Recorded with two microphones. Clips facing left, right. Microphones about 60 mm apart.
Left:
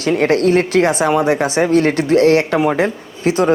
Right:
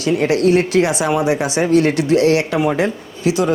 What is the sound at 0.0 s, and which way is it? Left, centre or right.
A man's voice, left.